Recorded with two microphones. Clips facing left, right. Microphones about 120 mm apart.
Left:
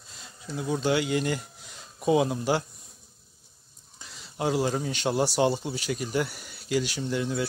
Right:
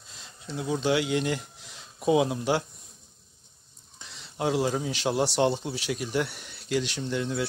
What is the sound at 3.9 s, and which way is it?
Speech, centre (ahead or behind).